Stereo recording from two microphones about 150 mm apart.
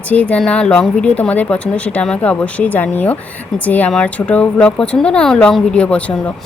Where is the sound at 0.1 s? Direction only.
10° left (ahead or behind).